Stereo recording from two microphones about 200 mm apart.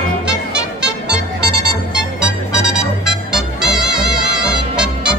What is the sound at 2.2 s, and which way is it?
Music, 5° right (ahead or behind).